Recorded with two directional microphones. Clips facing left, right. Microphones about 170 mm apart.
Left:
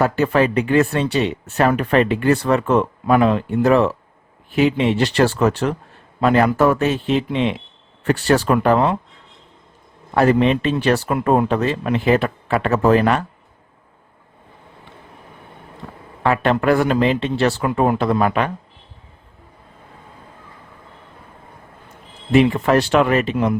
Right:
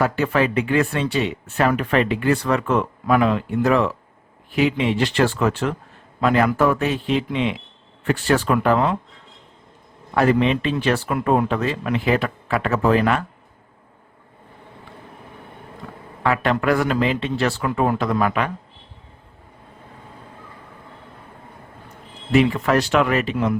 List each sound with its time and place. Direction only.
0.0 s speech: 40° left (ahead or behind)
8.0 s speech: 40° left (ahead or behind)
10.2 s speech: 40° left (ahead or behind)
11.6 s a man's voice: 30° left (ahead or behind)
12.7 s speech: 40° left (ahead or behind)
16.2 s a man's voice: 30° left (ahead or behind)
22.3 s a man's voice: 25° left (ahead or behind)